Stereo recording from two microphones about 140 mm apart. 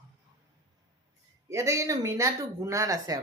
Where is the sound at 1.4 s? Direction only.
20° right (ahead or behind).